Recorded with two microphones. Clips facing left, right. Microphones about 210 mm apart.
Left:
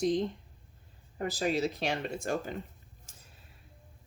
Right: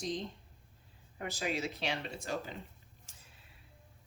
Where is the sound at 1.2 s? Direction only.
35° left (ahead or behind).